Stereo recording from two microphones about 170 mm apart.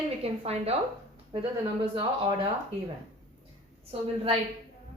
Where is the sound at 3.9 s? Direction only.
35° right (ahead or behind).